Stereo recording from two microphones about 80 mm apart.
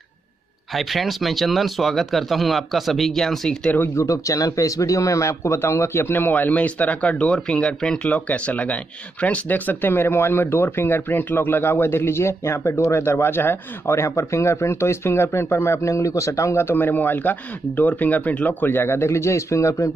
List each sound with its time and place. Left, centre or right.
0.7 s speech: centre
3.9 s speech: left